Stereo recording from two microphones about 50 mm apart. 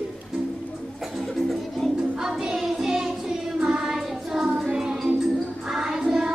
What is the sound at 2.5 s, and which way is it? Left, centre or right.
Child singing, centre.